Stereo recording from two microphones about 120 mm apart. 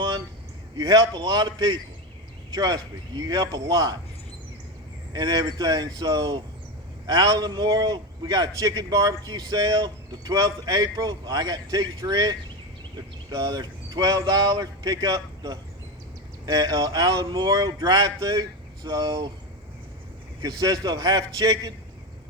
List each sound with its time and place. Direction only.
0.8 s a man's voice: 35° right (ahead or behind)
5.1 s a man's voice: 35° right (ahead or behind)
20.4 s a man's voice: 30° right (ahead or behind)